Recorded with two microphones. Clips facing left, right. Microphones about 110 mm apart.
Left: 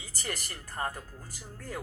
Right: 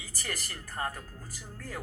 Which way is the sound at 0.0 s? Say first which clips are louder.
Left 1 dB; 25° left (ahead or behind).